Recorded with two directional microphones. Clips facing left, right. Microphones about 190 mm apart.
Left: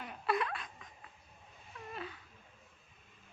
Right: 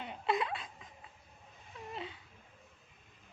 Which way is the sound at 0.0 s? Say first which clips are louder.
Right 1 dB; 25° right (ahead or behind).